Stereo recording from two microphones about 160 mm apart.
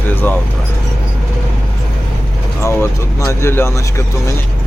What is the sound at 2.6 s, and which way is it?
Speech, 20° left (ahead or behind).